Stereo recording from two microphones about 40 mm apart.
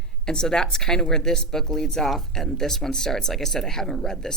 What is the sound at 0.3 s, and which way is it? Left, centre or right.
A woman's voice, centre.